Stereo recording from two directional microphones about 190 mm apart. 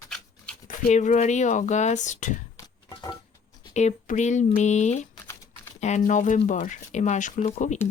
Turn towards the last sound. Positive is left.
turn(degrees=40)  # may be behind; listen again after turning